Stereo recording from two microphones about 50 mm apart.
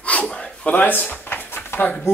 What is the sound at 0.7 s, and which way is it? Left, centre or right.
Drawer open or close, left.